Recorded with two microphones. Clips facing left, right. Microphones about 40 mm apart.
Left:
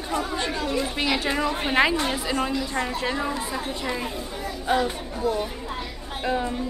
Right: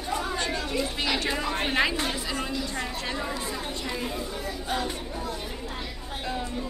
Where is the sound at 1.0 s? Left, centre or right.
Centre.